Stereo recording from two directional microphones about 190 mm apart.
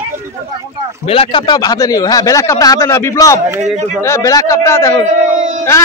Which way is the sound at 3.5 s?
5° right (ahead or behind).